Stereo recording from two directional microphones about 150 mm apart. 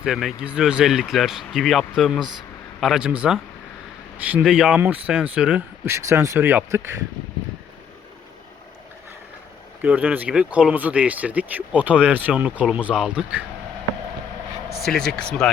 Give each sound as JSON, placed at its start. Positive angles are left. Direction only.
{"t": 0.0, "sound": "speech", "side_deg": 0}
{"t": 5.8, "sound": "speech", "side_deg": -20}
{"t": 9.8, "sound": "speech", "side_deg": -10}
{"t": 14.8, "sound": "speech", "side_deg": 5}